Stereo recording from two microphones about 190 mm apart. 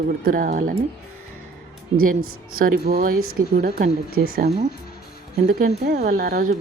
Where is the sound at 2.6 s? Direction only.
50° right (ahead or behind).